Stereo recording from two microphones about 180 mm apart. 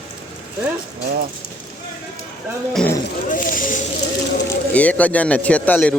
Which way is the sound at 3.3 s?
50° left (ahead or behind).